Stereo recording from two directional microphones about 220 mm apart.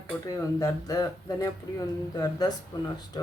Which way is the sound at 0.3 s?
15° left (ahead or behind).